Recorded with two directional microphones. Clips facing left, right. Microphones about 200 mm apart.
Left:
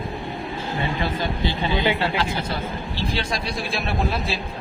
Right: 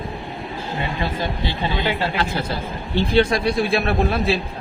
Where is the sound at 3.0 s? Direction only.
60° right (ahead or behind).